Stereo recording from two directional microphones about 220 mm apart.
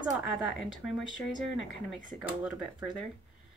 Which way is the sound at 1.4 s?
60° left (ahead or behind).